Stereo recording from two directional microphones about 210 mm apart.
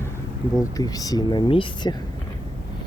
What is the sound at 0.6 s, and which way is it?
Speech, 15° left (ahead or behind).